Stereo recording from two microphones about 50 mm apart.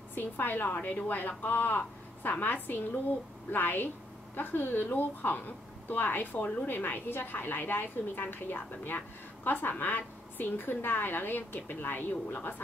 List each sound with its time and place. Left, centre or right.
0.1 s a woman's voice: left